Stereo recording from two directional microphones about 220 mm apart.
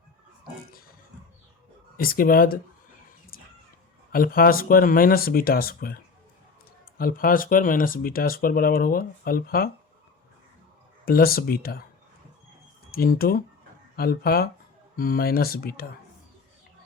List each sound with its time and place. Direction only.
2.0 s speech: 40° left (ahead or behind)
4.1 s speech: 40° left (ahead or behind)
7.0 s speech: 40° left (ahead or behind)
11.0 s speech: 40° left (ahead or behind)
12.9 s speech: 40° left (ahead or behind)